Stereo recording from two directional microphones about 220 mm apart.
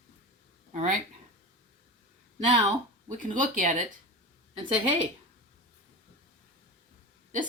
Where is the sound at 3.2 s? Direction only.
35° right (ahead or behind).